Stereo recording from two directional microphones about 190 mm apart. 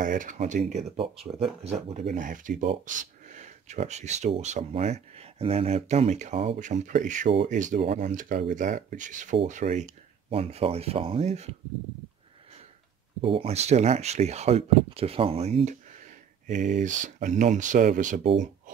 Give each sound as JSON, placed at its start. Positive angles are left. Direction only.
{"t": 0.0, "sound": "speech", "side_deg": -45}
{"t": 13.2, "sound": "speech", "side_deg": -30}